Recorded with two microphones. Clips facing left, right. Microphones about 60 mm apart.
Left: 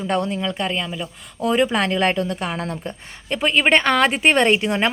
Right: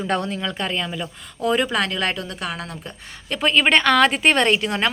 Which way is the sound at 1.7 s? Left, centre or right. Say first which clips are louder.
Left 3 dB; left.